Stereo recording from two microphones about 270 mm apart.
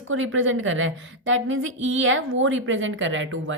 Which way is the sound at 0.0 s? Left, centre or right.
Right.